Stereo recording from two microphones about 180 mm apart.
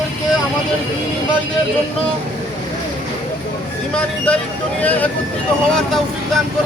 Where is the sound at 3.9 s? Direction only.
5° left (ahead or behind).